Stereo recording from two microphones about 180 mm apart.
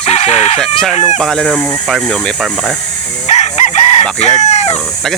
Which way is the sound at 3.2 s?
40° left (ahead or behind).